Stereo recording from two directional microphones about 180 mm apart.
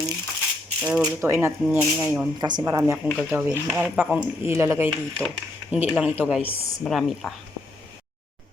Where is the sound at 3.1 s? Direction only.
Centre (ahead or behind).